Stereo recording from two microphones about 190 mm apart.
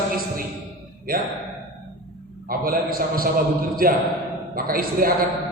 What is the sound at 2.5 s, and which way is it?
Speech, 50° right (ahead or behind).